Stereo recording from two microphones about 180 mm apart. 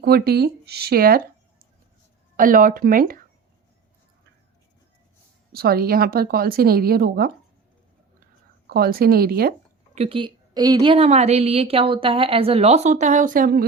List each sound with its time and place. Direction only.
0.0 s a woman's voice: 60° right (ahead or behind)
2.3 s speech: 50° right (ahead or behind)
5.5 s a woman's voice: 60° right (ahead or behind)
8.7 s a woman's voice: 55° right (ahead or behind)
9.9 s a woman's voice: 35° right (ahead or behind); by 13.7 s 55° right (ahead or behind)